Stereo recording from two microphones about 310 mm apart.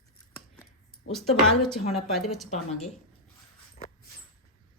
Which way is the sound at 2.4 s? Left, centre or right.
Left.